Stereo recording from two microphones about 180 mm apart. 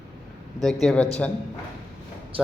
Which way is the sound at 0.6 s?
Centre (ahead or behind).